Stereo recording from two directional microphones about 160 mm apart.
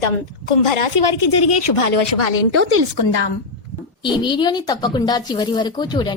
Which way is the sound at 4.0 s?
30° left (ahead or behind).